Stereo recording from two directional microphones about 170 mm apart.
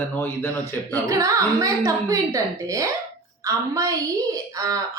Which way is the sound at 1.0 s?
20° right (ahead or behind).